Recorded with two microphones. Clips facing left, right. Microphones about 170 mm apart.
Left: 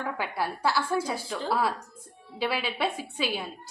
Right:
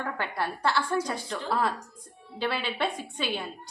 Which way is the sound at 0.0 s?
5° left (ahead or behind).